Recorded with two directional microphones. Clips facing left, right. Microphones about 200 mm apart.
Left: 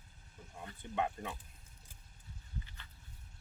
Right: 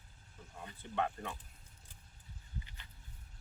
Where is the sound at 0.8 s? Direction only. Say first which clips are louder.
Even; 15° left (ahead or behind).